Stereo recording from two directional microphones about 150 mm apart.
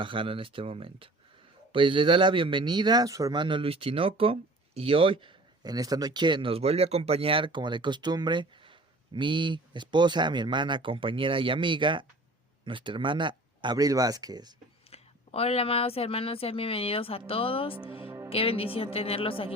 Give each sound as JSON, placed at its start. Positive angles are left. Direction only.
{"t": 0.0, "sound": "speech", "side_deg": -35}
{"t": 14.8, "sound": "speech", "side_deg": 40}
{"t": 18.0, "sound": "music", "side_deg": -20}
{"t": 18.3, "sound": "speech", "side_deg": 40}